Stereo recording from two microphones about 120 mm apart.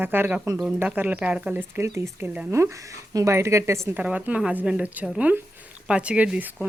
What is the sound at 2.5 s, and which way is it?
A woman's voice, 25° right (ahead or behind).